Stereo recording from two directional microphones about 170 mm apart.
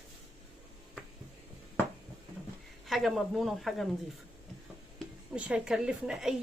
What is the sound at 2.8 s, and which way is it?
Speech, centre (ahead or behind).